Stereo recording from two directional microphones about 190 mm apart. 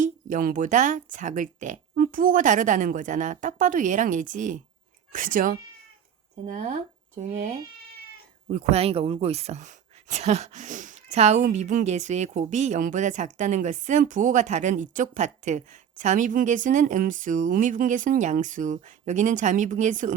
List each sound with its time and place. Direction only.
0.0 s speech: 45° right (ahead or behind)